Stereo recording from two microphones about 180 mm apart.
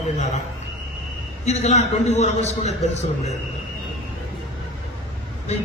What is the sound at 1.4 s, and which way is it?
A woman's voice, 40° left (ahead or behind).